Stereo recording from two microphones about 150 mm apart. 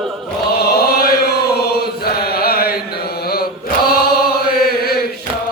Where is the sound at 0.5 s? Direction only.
90° left.